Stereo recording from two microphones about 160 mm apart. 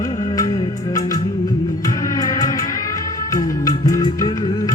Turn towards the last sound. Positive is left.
turn(degrees=25)  # may be behind; listen again after turning